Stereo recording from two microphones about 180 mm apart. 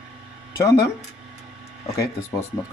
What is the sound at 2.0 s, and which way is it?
Speech, 15° left (ahead or behind).